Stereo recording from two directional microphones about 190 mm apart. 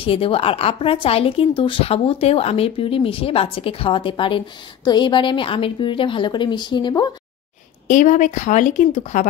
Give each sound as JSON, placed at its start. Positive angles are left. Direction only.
{"t": 0.0, "sound": "speech", "side_deg": 30}
{"t": 7.9, "sound": "speech", "side_deg": 40}